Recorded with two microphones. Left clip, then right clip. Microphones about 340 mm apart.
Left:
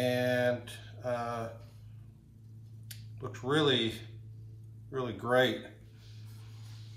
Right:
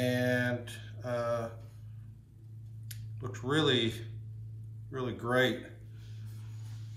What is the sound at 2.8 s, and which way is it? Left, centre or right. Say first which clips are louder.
Speech: left 1 dB; centre.